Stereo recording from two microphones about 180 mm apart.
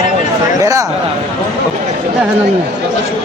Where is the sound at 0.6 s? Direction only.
20° right (ahead or behind).